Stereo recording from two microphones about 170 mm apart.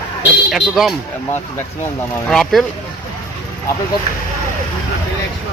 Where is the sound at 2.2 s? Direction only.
Centre (ahead or behind).